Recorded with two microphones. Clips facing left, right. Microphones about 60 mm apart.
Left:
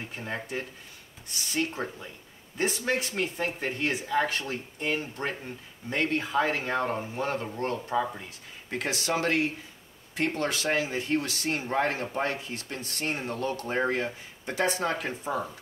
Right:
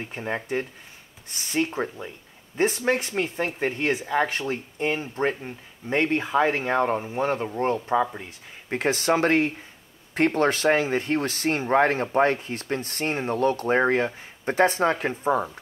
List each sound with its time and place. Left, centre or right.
0.1 s speech: right
8.6 s speech: right